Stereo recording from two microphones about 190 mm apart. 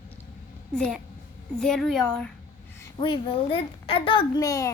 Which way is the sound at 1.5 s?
5° left (ahead or behind).